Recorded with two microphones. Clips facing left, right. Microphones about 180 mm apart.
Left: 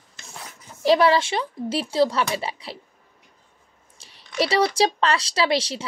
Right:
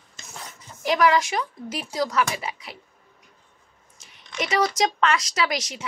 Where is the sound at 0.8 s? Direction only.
30° left (ahead or behind).